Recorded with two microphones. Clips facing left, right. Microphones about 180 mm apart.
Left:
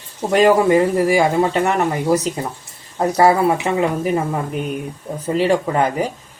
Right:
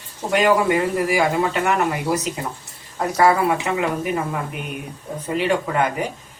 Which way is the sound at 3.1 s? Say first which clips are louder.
Left 2 dB; 30° left (ahead or behind).